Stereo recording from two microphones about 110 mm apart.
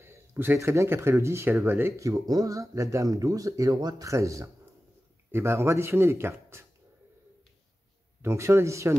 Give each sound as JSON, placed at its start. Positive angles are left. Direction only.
{"t": 0.0, "sound": "speech", "side_deg": -25}
{"t": 8.2, "sound": "speech", "side_deg": -25}